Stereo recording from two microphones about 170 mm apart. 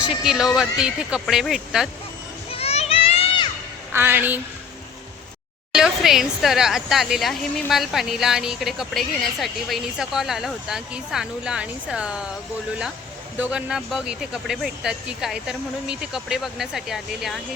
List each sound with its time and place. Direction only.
0.0 s a woman's voice: 5° right (ahead or behind)
2.5 s children playing: 35° left (ahead or behind)
3.9 s a woman's voice: 10° right (ahead or behind)
5.7 s a woman's voice: 5° right (ahead or behind)
13.4 s a woman's voice: 5° right (ahead or behind)